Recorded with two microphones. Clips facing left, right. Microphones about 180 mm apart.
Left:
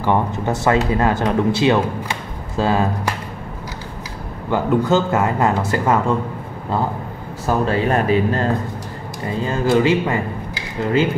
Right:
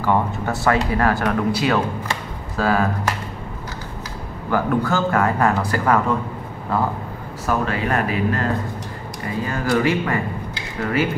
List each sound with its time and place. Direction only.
0.0 s speech: 20° left (ahead or behind)
4.5 s speech: 20° left (ahead or behind)
7.4 s speech: 30° left (ahead or behind)